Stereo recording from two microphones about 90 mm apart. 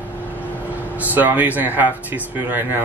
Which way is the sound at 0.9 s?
20° right (ahead or behind).